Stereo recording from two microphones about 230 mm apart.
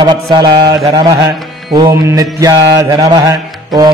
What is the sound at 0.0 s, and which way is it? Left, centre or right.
Mantra, centre.